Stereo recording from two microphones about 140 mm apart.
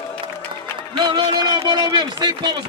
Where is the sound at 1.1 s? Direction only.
30° right (ahead or behind).